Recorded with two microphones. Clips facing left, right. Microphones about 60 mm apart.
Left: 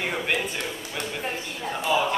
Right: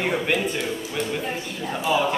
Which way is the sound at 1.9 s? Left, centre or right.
Centre.